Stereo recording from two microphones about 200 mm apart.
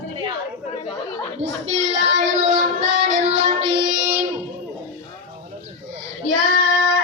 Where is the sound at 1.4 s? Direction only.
35° right (ahead or behind).